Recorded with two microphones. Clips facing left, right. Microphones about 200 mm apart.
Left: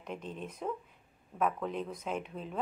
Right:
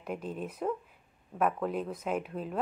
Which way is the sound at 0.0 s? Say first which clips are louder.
Right 4 dB; 5° right (ahead or behind).